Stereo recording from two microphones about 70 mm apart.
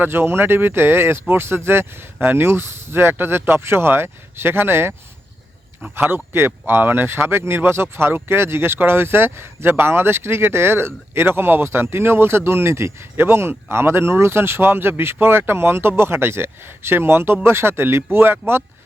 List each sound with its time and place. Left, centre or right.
0.0 s speech: right